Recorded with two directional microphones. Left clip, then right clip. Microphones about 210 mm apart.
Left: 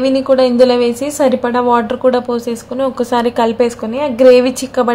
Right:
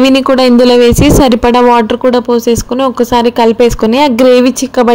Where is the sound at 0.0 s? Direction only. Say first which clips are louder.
Right 4 dB; 40° right (ahead or behind).